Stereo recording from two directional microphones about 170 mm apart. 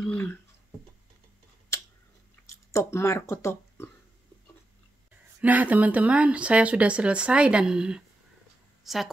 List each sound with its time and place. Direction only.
0.0 s a sound: 5° left (ahead or behind)
2.7 s speech: 15° left (ahead or behind)
5.4 s speech: 10° right (ahead or behind)